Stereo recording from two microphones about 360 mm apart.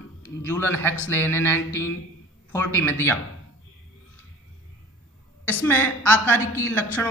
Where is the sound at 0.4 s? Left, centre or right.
Centre.